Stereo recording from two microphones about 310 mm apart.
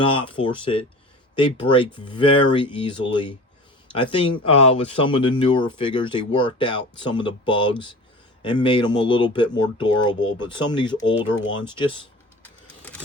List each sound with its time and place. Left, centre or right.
0.0 s speech: centre
12.4 s vehicle: centre